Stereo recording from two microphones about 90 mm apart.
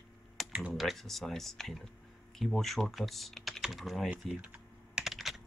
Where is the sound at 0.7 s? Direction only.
Centre (ahead or behind).